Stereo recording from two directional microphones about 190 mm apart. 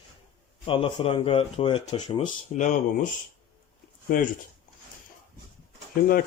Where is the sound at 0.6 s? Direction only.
30° left (ahead or behind).